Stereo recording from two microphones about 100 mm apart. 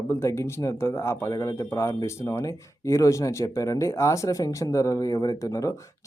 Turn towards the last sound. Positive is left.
turn(degrees=35)  # may be behind; listen again after turning